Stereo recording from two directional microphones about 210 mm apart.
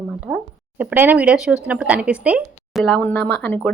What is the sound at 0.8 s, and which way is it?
Speech, 10° right (ahead or behind).